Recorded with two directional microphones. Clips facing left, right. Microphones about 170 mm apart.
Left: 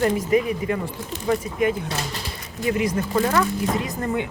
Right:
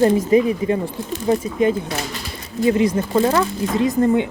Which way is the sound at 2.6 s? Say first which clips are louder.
Right 6 dB; 25° right (ahead or behind).